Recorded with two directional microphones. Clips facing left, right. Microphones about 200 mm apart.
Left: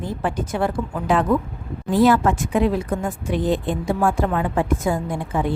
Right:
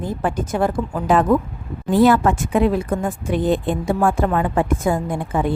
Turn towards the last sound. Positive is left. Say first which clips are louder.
# right 2 dB
turn(degrees=-50)  # may be behind; listen again after turning